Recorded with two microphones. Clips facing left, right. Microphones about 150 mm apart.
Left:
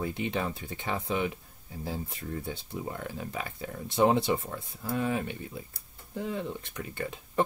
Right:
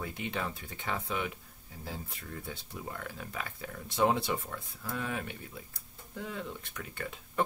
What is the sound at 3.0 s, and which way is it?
Speech, 25° left (ahead or behind).